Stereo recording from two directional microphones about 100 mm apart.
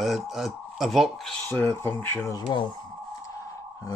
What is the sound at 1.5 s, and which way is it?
Speech, 25° left (ahead or behind).